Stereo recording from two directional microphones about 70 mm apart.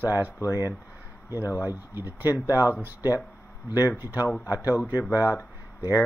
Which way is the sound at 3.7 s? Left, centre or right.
Right.